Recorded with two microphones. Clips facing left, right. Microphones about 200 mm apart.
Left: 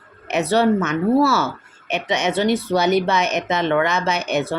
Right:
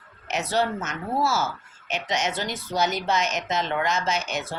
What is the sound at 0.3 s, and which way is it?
Speech, 60° left (ahead or behind).